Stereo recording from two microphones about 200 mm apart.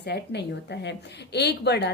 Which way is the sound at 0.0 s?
55° left (ahead or behind).